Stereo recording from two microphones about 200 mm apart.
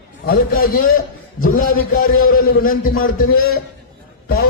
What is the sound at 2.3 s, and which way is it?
Speech, 45° left (ahead or behind).